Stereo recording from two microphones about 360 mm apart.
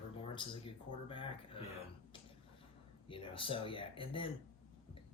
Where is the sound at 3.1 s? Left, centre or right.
Centre.